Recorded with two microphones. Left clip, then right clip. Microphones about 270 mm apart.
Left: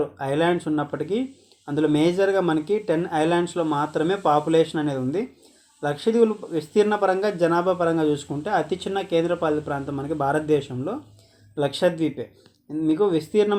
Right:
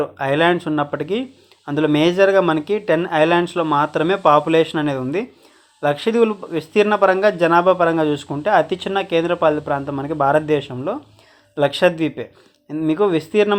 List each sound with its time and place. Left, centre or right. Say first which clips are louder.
0.0 s speech: right 6 dB; right